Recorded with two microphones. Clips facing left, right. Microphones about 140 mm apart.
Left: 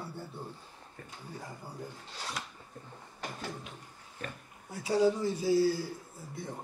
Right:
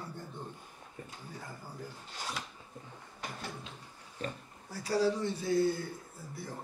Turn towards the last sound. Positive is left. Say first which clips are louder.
# left 2 dB
turn(degrees=20)  # may be behind; listen again after turning